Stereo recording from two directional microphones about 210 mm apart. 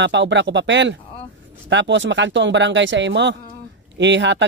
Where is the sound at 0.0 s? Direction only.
60° right (ahead or behind).